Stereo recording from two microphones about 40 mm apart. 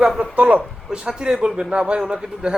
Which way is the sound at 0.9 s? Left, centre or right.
Centre.